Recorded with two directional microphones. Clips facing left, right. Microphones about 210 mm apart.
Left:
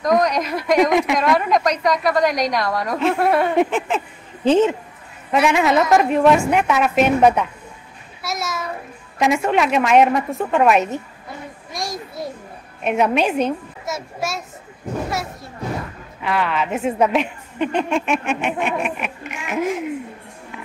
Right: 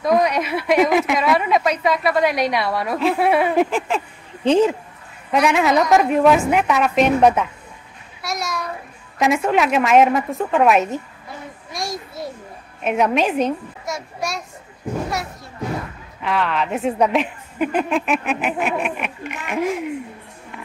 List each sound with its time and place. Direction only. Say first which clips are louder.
0.0 s speech: even; 5° right (ahead or behind)
8.2 s a sound: even; centre (ahead or behind)
9.2 s speech: even; centre (ahead or behind)
11.7 s a sound: even; centre (ahead or behind)
12.8 s speech: even; centre (ahead or behind)
16.2 s speech: even; 5° left (ahead or behind)